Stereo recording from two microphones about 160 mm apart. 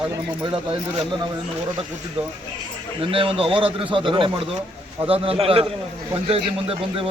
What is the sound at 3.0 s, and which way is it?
A man's voice, 35° right (ahead or behind).